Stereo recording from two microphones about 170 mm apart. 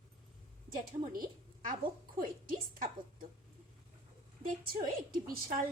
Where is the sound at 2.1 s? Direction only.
55° right (ahead or behind).